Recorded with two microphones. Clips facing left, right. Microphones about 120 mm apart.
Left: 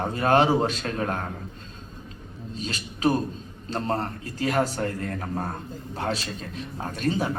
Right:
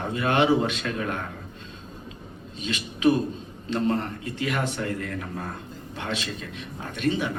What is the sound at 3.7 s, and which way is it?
A man's voice, 40° left (ahead or behind).